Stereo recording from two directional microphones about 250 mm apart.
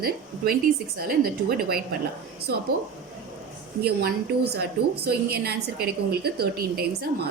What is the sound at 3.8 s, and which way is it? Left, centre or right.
A woman's voice, right.